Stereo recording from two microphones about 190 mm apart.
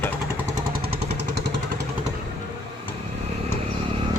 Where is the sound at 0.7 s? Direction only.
55° right (ahead or behind).